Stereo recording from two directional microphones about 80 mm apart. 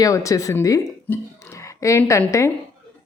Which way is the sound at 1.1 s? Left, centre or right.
Left.